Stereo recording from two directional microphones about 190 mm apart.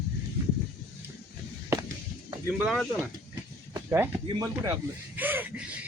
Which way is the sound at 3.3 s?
10° right (ahead or behind).